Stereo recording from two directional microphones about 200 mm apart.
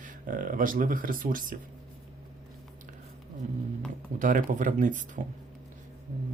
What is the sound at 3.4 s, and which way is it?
Speech, 35° right (ahead or behind).